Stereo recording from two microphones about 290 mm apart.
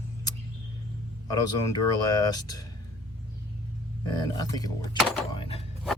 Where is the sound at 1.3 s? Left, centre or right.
Centre.